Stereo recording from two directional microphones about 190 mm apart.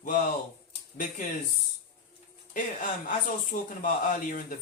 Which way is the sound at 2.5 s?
45° left (ahead or behind).